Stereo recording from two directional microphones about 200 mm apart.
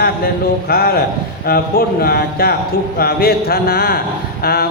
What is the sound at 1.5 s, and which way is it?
Mantra, 50° left (ahead or behind).